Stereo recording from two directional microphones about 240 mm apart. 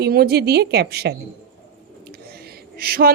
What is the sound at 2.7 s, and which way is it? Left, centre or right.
Speech, right.